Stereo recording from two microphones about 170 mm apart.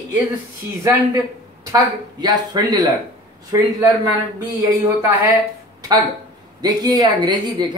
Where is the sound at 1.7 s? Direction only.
25° right (ahead or behind).